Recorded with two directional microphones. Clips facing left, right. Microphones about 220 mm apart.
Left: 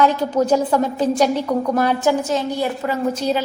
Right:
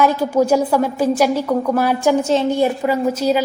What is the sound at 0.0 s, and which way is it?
A woman's voice, 10° right (ahead or behind).